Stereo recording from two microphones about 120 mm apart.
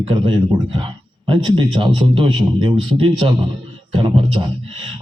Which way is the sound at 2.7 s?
55° right (ahead or behind).